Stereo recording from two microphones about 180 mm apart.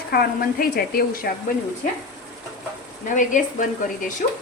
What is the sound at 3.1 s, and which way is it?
Speech, 45° left (ahead or behind).